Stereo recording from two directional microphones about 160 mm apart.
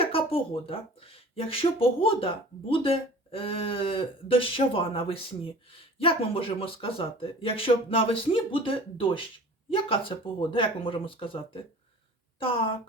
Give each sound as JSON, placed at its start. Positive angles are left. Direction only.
{"t": 0.0, "sound": "speech", "side_deg": 35}